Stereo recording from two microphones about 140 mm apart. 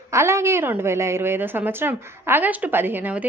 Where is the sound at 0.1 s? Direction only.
20° right (ahead or behind).